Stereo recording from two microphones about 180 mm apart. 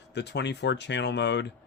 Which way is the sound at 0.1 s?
70° left (ahead or behind).